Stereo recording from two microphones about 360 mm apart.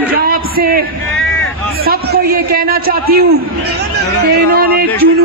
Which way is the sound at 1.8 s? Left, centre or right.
Right.